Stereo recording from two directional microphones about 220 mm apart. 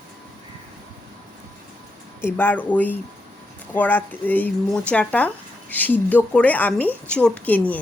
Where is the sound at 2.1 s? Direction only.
10° left (ahead or behind).